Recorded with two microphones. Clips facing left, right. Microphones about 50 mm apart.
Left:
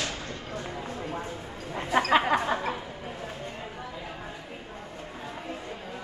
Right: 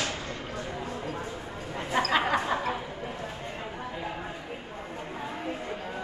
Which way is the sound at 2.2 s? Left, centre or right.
Centre.